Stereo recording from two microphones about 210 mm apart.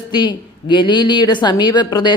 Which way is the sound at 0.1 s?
20° left (ahead or behind).